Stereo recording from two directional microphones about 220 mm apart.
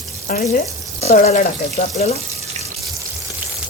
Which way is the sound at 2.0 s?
30° left (ahead or behind).